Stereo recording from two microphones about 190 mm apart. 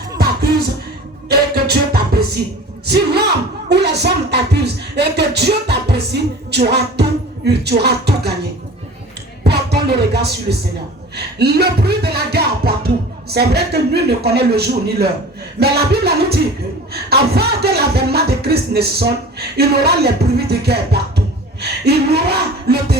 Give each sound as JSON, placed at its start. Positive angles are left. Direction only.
{"t": 1.3, "sound": "music", "side_deg": -55}
{"t": 9.4, "sound": "music", "side_deg": -60}